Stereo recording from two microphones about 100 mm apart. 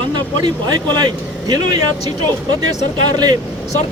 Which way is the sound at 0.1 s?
45° right (ahead or behind).